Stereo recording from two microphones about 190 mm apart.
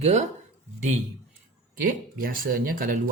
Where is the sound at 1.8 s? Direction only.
45° right (ahead or behind).